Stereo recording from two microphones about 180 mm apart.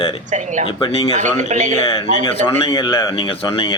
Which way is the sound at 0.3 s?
45° right (ahead or behind).